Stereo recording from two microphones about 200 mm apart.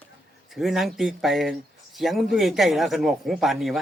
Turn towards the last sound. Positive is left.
turn(degrees=0)  # may be behind; listen again after turning